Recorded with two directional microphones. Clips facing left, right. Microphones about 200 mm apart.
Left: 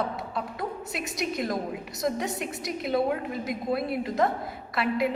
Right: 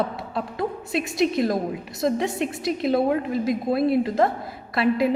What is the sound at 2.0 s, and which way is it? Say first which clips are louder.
Speech: right 6 dB; 30° right (ahead or behind).